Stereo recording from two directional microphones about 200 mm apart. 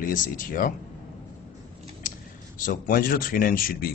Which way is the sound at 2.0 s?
45° left (ahead or behind).